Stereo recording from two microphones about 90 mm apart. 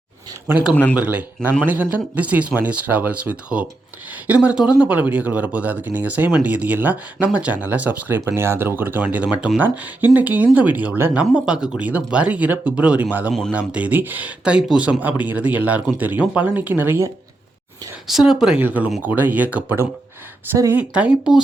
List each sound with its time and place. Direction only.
0.9 s speech: 15° right (ahead or behind)
11.1 s speech: 10° right (ahead or behind)
18.1 s speech: 5° right (ahead or behind)
18.6 s speech: 20° right (ahead or behind)
20.7 s speech: 15° right (ahead or behind)